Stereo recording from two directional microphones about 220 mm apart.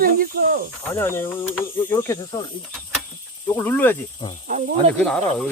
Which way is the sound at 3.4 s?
10° left (ahead or behind).